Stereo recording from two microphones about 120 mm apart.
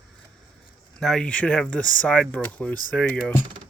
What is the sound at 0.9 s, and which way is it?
Speech, 5° left (ahead or behind).